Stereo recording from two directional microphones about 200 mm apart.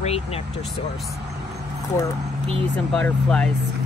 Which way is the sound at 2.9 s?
5° left (ahead or behind).